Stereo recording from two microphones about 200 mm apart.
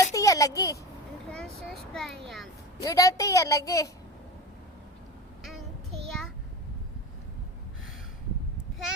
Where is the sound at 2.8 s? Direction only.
15° left (ahead or behind).